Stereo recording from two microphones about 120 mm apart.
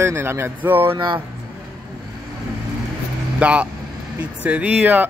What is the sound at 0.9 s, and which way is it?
Speech, 40° right (ahead or behind).